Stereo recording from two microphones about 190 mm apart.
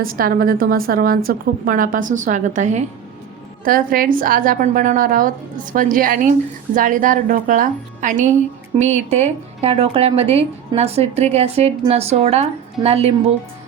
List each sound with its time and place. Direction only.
0.0 s a woman's voice: 50° right (ahead or behind); by 13.1 s 30° right (ahead or behind)